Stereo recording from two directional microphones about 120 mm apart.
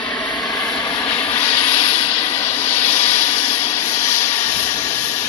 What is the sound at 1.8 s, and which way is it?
Vehicle, 45° left (ahead or behind).